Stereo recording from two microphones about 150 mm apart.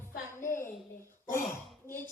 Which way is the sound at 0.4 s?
15° left (ahead or behind).